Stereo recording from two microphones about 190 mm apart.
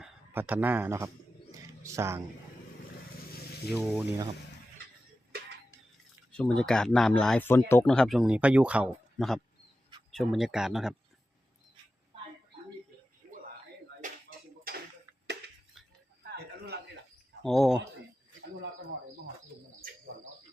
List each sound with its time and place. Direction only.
0.0 s speech: 10° right (ahead or behind)
1.5 s bird: 15° right (ahead or behind)
3.8 s speech: 10° right (ahead or behind)
6.3 s speech: 5° left (ahead or behind)
7.9 s speech: centre (ahead or behind)
14.0 s a sound: 50° right (ahead or behind)
16.2 s a sound: 60° right (ahead or behind)
17.4 s speech: centre (ahead or behind)